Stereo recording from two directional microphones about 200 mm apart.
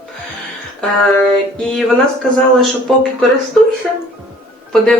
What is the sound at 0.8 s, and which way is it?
Speech, 5° left (ahead or behind).